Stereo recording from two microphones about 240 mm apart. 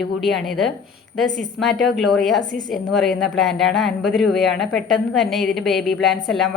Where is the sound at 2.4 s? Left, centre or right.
Right.